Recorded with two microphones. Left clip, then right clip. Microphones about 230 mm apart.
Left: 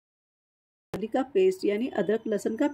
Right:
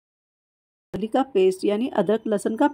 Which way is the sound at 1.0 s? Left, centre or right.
Centre.